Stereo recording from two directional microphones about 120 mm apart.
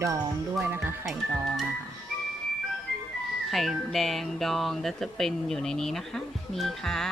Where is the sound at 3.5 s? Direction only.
Centre (ahead or behind).